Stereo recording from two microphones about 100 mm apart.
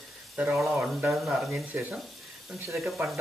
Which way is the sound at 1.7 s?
15° right (ahead or behind).